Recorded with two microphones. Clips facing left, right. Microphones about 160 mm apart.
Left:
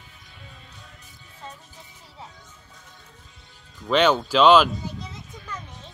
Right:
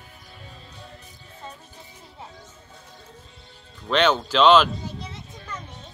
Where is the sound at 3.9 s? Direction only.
5° left (ahead or behind).